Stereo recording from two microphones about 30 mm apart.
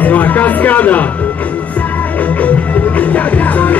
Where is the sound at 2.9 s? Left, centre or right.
Left.